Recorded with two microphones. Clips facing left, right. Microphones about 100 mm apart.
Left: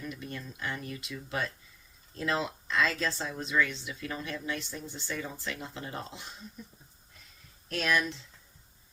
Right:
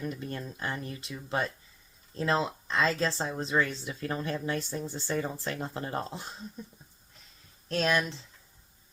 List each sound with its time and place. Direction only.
0.0 s speech: 40° right (ahead or behind)
7.7 s speech: 30° right (ahead or behind)